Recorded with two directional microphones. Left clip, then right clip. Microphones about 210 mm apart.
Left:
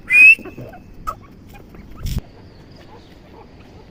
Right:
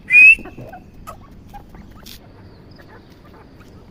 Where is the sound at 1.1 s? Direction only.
Centre (ahead or behind).